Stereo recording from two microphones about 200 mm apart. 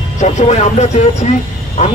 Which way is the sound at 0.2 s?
35° left (ahead or behind).